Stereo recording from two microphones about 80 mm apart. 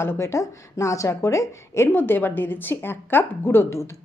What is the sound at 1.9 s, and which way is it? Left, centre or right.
Speech, left.